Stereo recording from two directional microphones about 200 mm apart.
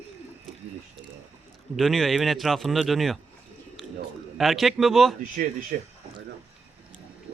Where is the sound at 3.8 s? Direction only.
Centre (ahead or behind).